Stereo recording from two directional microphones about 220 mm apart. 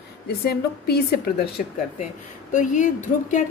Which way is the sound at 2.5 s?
35° left (ahead or behind).